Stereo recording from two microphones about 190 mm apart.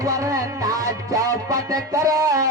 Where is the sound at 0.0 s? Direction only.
15° right (ahead or behind).